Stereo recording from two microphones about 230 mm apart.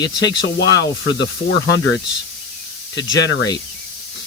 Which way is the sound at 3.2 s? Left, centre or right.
Left.